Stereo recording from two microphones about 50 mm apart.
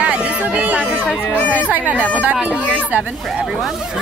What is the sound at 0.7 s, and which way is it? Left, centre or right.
Music, right.